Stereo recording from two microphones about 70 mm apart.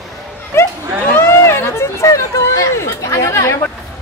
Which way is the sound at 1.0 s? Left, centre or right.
Left.